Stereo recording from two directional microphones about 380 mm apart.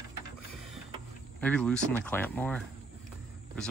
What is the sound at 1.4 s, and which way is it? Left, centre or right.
Speech, centre.